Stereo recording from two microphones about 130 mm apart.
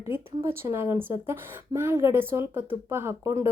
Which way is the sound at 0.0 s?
20° right (ahead or behind).